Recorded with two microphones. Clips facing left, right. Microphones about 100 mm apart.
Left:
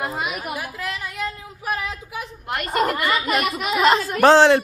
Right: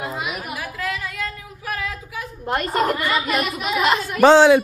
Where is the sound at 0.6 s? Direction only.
25° left (ahead or behind).